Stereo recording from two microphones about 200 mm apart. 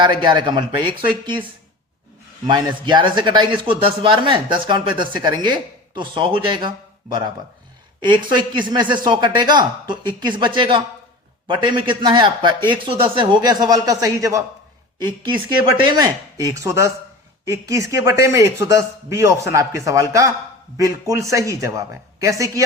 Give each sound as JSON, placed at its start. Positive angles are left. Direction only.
{"t": 0.2, "sound": "speech", "side_deg": -25}
{"t": 2.5, "sound": "speech", "side_deg": -20}
{"t": 15.7, "sound": "a man's voice", "side_deg": -20}